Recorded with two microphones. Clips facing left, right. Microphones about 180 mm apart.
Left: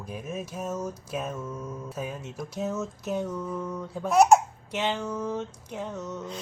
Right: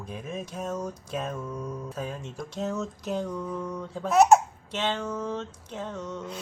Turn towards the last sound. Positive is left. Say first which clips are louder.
# even
turn(degrees=10)  # may be behind; listen again after turning